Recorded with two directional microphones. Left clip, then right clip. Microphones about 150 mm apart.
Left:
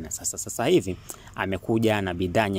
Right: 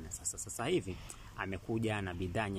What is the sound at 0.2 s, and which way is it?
Speech, 55° left (ahead or behind).